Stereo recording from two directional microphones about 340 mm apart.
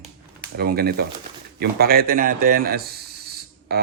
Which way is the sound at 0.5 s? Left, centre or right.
Right.